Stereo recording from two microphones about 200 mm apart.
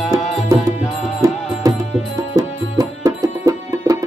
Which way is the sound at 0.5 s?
15° right (ahead or behind).